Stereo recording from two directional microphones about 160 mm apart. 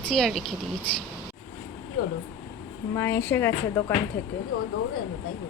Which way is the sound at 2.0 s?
70° left (ahead or behind).